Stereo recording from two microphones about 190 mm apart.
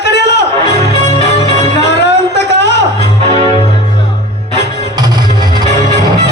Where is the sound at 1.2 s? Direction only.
35° left (ahead or behind).